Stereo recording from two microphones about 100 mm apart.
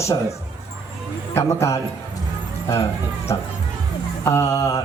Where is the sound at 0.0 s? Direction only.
30° left (ahead or behind).